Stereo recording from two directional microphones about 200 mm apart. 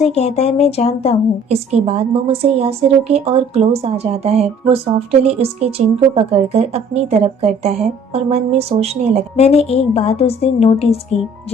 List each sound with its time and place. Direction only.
0.0 s speech: 30° left (ahead or behind)
1.5 s speech: 30° right (ahead or behind)
9.3 s a woman's voice: 30° left (ahead or behind)